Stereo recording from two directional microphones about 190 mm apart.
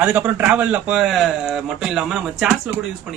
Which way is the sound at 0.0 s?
10° right (ahead or behind).